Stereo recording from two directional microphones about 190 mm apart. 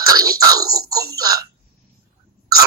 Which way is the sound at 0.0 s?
20° right (ahead or behind).